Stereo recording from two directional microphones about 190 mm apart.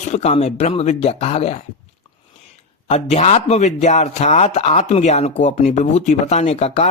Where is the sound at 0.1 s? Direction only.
35° left (ahead or behind).